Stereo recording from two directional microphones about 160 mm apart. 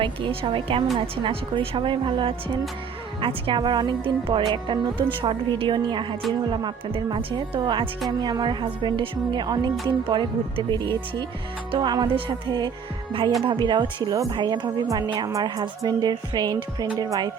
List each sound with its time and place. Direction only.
0.0 s a woman's voice: 30° right (ahead or behind)